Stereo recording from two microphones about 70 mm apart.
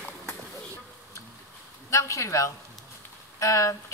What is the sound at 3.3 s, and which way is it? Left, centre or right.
Speech, left.